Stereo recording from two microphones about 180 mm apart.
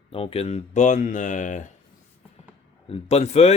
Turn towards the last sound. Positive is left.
turn(degrees=35)  # may be behind; listen again after turning